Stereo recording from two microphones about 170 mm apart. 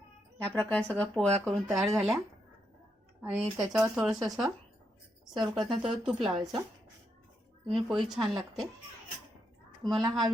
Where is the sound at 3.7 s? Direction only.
5° right (ahead or behind).